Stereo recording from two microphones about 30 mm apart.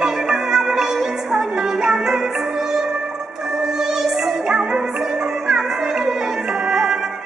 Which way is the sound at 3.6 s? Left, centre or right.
Centre.